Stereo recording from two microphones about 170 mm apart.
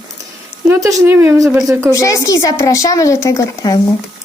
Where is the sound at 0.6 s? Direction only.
15° right (ahead or behind).